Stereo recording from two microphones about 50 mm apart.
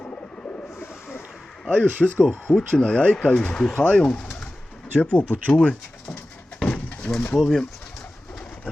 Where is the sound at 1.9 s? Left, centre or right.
Left.